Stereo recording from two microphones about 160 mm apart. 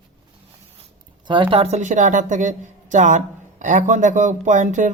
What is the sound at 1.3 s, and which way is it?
A woman's voice, 30° right (ahead or behind).